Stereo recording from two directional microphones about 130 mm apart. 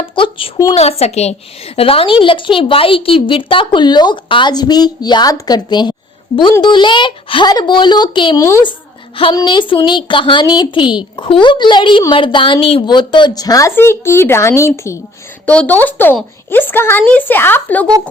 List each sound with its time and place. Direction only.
0.0 s a woman's voice: 45° left (ahead or behind); by 14.9 s 20° left (ahead or behind)
15.4 s speech: 10° left (ahead or behind)